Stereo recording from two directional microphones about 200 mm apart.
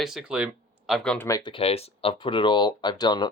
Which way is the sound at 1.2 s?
20° left (ahead or behind).